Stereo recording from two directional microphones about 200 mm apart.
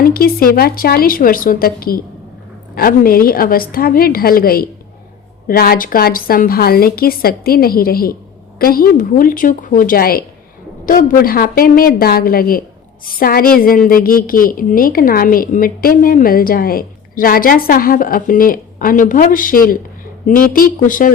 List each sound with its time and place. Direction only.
0.0 s a woman's voice: 50° left (ahead or behind)